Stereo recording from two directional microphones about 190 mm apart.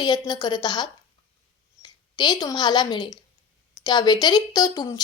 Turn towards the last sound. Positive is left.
turn(degrees=20)  # may be behind; listen again after turning